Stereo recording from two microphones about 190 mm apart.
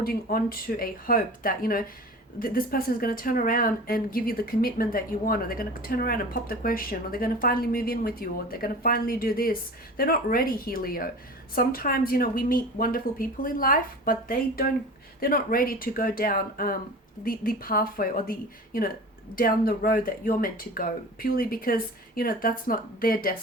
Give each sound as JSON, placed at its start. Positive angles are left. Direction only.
{"t": 0.0, "sound": "speech", "side_deg": 50}